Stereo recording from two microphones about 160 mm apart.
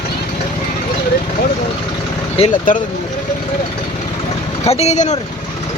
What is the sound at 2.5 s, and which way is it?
Speech, 55° left (ahead or behind).